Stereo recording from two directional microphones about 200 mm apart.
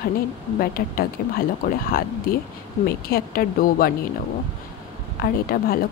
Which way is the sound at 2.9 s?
50° left (ahead or behind).